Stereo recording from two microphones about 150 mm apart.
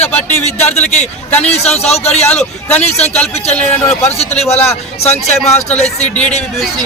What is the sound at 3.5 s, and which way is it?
Speech, 10° left (ahead or behind).